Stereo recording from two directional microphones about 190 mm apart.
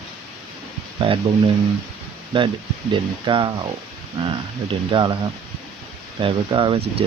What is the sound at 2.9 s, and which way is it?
Speech, 25° right (ahead or behind).